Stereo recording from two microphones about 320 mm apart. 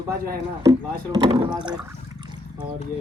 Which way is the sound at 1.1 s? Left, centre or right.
Centre.